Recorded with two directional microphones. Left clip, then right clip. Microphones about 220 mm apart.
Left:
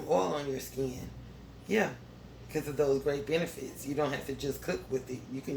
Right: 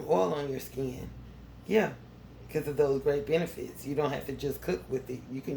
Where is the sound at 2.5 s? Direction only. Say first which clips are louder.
Right 2 dB; 35° right (ahead or behind).